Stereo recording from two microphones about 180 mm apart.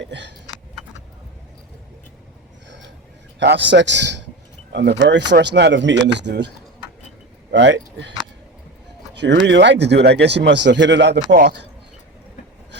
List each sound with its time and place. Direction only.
0.0 s a sound: 80° right
2.6 s vehicle: 85° right
3.4 s speech: 75° right (ahead or behind)
7.5 s speech: 85° right
9.1 s speech: 75° right (ahead or behind)